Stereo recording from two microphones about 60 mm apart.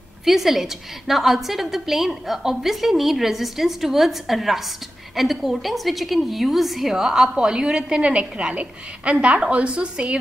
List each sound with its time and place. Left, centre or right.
0.2 s a woman's voice: centre